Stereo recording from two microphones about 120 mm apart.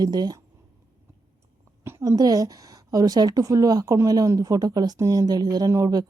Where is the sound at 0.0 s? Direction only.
35° right (ahead or behind).